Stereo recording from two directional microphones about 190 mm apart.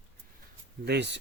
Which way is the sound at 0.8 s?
60° right (ahead or behind).